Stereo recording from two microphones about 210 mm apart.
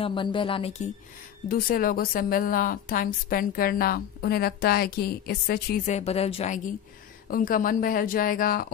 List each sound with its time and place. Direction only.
0.0 s speech: 25° left (ahead or behind)
1.5 s a woman's voice: 45° left (ahead or behind)
5.9 s a woman's voice: 30° left (ahead or behind)